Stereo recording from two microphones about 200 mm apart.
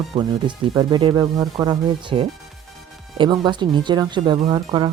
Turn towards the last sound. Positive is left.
turn(degrees=-20)  # may be behind; listen again after turning